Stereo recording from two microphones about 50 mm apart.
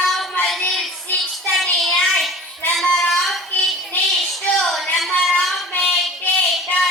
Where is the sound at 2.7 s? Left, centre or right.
Centre.